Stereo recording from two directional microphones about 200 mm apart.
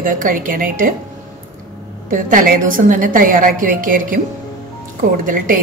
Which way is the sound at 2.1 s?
45° right (ahead or behind).